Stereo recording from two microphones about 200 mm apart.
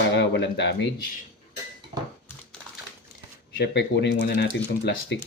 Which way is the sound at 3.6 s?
60° left (ahead or behind).